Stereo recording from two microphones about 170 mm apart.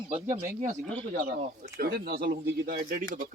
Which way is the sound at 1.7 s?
65° right (ahead or behind).